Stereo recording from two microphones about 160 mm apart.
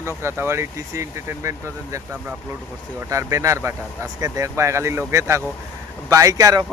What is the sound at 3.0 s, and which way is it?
Speech, 20° right (ahead or behind).